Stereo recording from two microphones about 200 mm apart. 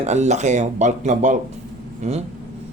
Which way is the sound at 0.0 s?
35° right (ahead or behind).